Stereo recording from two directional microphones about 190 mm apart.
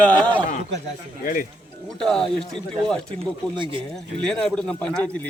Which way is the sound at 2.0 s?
5° left (ahead or behind).